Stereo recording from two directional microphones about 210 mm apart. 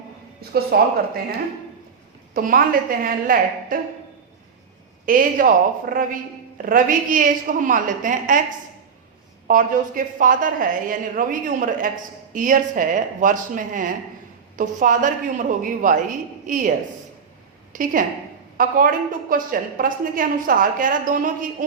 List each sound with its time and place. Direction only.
0.7 s speech: 50° right (ahead or behind)
2.3 s a woman's voice: 40° right (ahead or behind)
5.0 s a woman's voice: 40° right (ahead or behind)
9.5 s a woman's voice: 40° right (ahead or behind)